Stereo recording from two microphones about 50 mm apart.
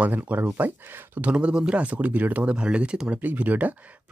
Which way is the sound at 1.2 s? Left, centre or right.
Right.